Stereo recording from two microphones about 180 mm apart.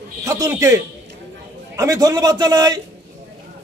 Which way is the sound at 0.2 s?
15° right (ahead or behind).